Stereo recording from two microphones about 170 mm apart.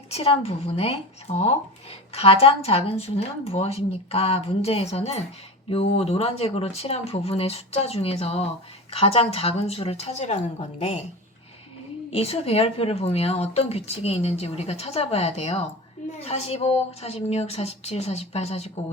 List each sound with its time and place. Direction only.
0.1 s speech: 35° left (ahead or behind)
12.1 s speech: 35° left (ahead or behind)